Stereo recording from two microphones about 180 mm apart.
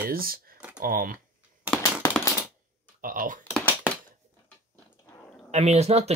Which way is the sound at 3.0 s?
50° right (ahead or behind).